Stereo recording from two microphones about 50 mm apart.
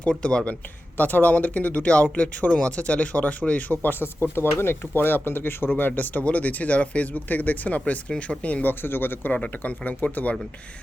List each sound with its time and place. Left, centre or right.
0.0 s speech: left
0.9 s speech: left
3.8 s speech: left
8.6 s speech: left
9.3 s speech: left